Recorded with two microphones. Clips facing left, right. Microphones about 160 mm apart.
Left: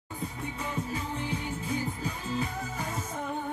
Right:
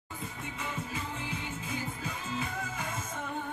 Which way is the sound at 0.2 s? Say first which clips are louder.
Left 4 dB; 40° left (ahead or behind).